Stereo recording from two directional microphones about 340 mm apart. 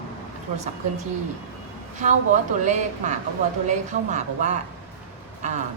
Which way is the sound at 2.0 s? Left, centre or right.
Right.